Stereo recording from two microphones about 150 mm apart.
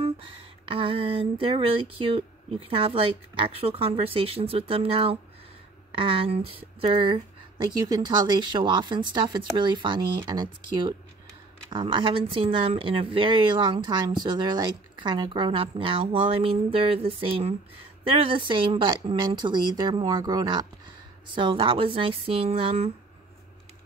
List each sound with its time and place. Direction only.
0.0 s a woman's voice: 35° right (ahead or behind)